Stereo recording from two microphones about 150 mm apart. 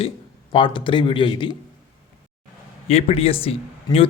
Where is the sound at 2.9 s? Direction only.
45° left (ahead or behind).